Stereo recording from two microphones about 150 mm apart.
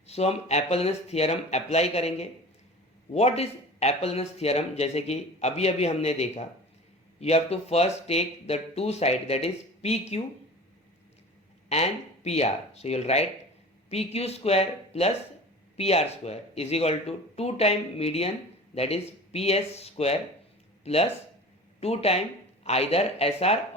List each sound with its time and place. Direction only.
0.1 s speech: 45° left (ahead or behind)
11.7 s speech: 45° left (ahead or behind)